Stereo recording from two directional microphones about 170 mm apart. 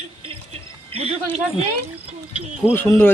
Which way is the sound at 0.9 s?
35° right (ahead or behind).